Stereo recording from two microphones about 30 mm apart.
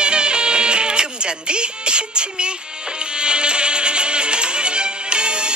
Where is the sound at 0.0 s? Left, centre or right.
Right.